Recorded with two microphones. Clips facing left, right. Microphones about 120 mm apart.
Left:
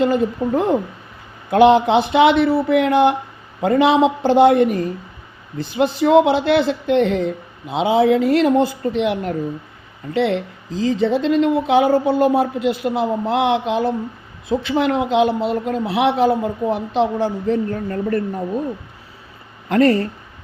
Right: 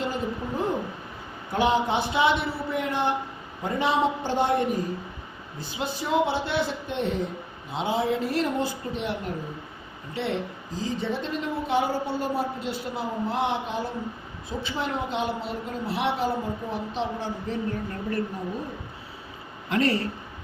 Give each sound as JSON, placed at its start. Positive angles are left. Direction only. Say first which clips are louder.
{"t": 0.0, "sound": "a woman's voice", "louder": "left 12 dB", "side_deg": 70}
{"t": 14.5, "sound": "speech", "louder": "left 12 dB", "side_deg": 75}
{"t": 19.7, "sound": "speech", "louder": "left 9 dB", "side_deg": 50}